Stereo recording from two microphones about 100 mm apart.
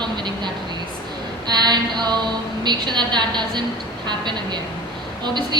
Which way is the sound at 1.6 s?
45° right (ahead or behind).